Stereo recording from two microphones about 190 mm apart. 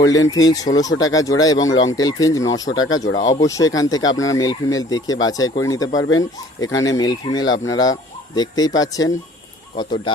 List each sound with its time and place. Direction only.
0.0 s speech: 20° left (ahead or behind)
1.7 s speech: 90° left
2.0 s speech: 20° left (ahead or behind)
2.7 s speech: 90° left
3.2 s speech: 20° left (ahead or behind)
5.9 s speech: 90° left
6.8 s speech: 20° left (ahead or behind)